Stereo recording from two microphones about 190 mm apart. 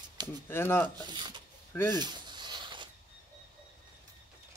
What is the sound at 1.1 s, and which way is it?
Speech, 20° right (ahead or behind).